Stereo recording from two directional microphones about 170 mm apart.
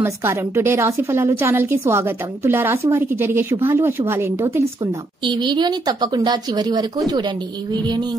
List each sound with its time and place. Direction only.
0.0 s a woman's voice: 15° right (ahead or behind)
5.2 s speech: 25° right (ahead or behind)